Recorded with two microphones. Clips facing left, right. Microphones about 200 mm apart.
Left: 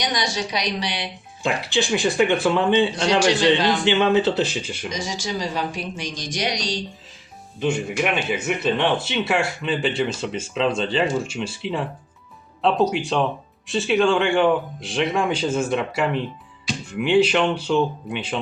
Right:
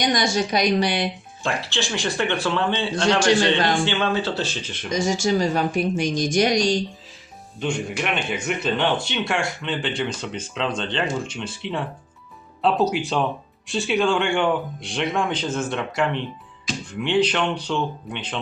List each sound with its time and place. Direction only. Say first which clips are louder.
0.0 s speech: right 4 dB; 50° right (ahead or behind)
1.4 s speech: left 4 dB; 15° left (ahead or behind)
3.8 s speech: left 5 dB; 20° left (ahead or behind)
4.9 s speech: right 10 dB; 50° right (ahead or behind)
7.6 s speech: left 3 dB; 5° left (ahead or behind)